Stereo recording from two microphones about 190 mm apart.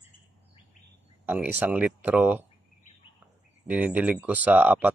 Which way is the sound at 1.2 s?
10° right (ahead or behind).